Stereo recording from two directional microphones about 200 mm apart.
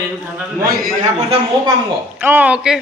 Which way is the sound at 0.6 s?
50° right (ahead or behind).